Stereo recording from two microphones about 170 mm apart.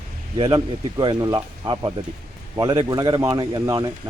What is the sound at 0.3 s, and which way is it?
Speech, 25° right (ahead or behind).